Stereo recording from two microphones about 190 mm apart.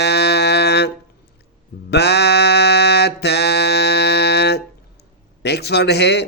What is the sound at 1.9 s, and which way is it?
Mantra, 60° left (ahead or behind).